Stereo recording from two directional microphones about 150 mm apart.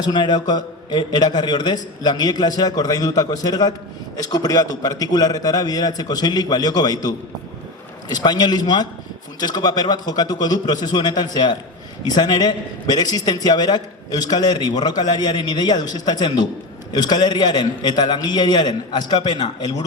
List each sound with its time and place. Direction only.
0.0 s a man's voice: 30° left (ahead or behind)